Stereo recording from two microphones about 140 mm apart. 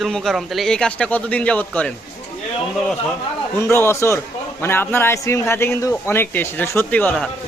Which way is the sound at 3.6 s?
20° left (ahead or behind).